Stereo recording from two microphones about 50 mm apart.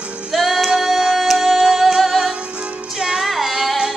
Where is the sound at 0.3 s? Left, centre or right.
Centre.